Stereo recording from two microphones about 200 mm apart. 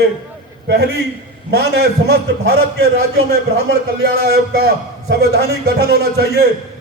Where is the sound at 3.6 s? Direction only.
55° right (ahead or behind).